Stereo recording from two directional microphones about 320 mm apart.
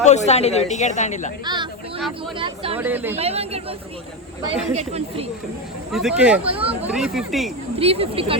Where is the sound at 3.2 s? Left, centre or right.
Centre.